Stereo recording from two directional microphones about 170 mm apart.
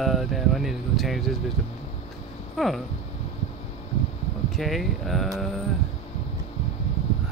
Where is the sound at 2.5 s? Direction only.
Centre (ahead or behind).